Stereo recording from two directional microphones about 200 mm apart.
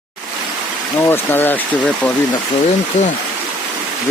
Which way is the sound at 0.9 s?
10° left (ahead or behind).